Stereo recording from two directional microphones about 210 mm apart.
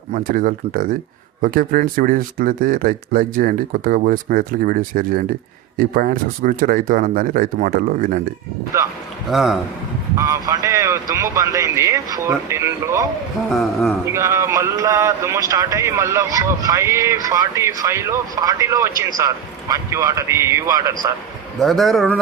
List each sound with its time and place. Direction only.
0.1 s speech: 40° right (ahead or behind)
8.7 s speech: 15° right (ahead or behind)
9.3 s speech: centre (ahead or behind)
10.2 s speech: 15° right (ahead or behind)
13.5 s speech: centre (ahead or behind)
14.0 s speech: 15° right (ahead or behind)
21.6 s speech: centre (ahead or behind)